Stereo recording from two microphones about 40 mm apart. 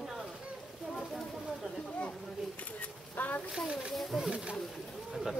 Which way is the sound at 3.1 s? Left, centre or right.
Left.